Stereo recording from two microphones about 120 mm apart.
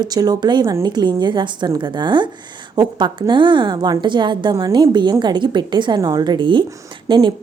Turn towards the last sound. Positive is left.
turn(degrees=-40)  # may be behind; listen again after turning